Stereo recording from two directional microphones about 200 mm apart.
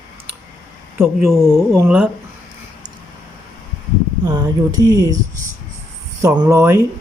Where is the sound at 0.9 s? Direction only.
Centre (ahead or behind).